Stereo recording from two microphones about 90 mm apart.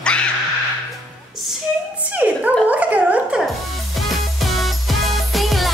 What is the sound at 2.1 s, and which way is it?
Speech, 15° right (ahead or behind).